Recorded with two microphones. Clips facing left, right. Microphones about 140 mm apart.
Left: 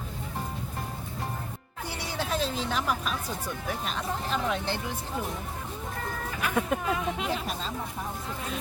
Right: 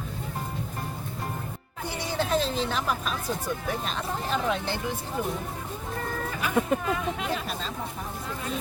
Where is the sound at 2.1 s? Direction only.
10° left (ahead or behind).